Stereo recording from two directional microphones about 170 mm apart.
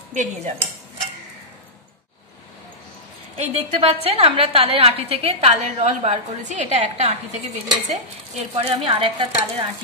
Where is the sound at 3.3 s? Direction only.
35° right (ahead or behind).